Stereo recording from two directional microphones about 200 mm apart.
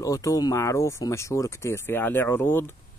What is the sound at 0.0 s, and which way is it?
A man's voice, 15° left (ahead or behind).